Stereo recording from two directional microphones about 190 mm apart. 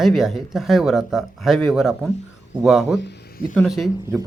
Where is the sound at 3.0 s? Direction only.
55° left (ahead or behind).